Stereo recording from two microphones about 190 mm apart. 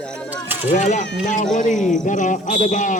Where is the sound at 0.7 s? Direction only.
40° left (ahead or behind).